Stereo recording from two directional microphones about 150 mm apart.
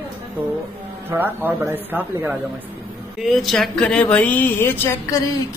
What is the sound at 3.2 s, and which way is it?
Speech, centre (ahead or behind).